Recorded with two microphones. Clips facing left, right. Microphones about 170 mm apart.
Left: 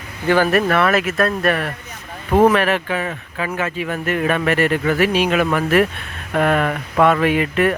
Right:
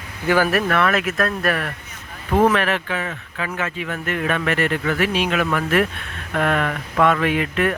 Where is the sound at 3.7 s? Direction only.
10° left (ahead or behind).